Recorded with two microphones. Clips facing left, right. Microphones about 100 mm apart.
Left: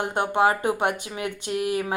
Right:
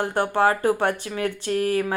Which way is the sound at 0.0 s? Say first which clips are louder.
Right 1 dB; 20° left (ahead or behind).